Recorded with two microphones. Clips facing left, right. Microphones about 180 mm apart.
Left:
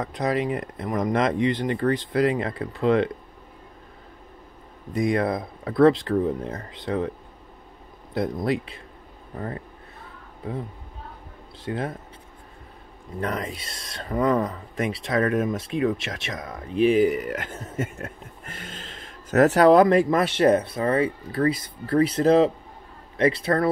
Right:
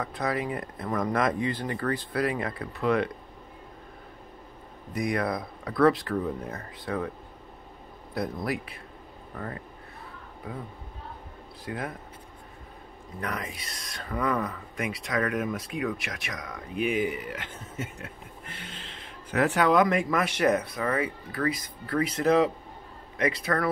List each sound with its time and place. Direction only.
0.0 s speech: 20° left (ahead or behind)
4.9 s speech: 25° left (ahead or behind)
8.1 s speech: 25° left (ahead or behind)
10.4 s speech: 25° left (ahead or behind)
11.6 s speech: 30° left (ahead or behind)
13.2 s speech: 30° left (ahead or behind)